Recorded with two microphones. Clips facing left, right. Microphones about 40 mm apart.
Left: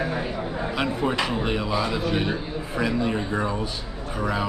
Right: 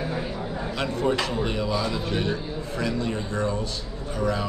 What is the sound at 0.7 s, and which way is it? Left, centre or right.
Speech, centre.